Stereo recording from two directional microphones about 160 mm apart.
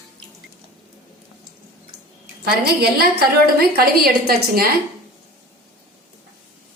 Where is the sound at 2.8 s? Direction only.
80° right.